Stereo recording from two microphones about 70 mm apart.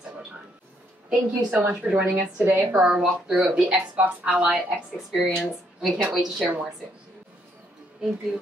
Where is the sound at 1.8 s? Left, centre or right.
Right.